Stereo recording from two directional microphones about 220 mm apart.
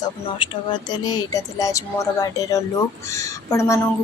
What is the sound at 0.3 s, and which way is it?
Speech, 20° left (ahead or behind).